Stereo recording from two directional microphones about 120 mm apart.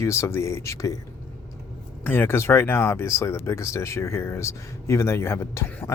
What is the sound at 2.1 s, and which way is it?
Speech, 20° left (ahead or behind).